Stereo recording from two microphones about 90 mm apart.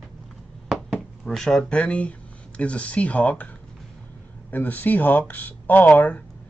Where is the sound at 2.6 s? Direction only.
15° left (ahead or behind).